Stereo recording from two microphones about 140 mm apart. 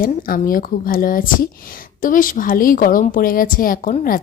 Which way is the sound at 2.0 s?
75° left (ahead or behind).